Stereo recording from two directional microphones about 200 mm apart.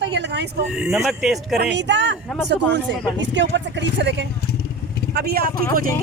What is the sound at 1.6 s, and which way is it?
Speech, 60° right (ahead or behind).